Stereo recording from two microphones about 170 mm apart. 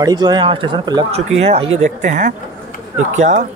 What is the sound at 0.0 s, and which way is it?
Speech, 25° right (ahead or behind).